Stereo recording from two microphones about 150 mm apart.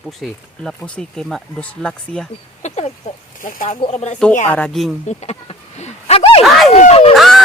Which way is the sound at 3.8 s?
45° left (ahead or behind).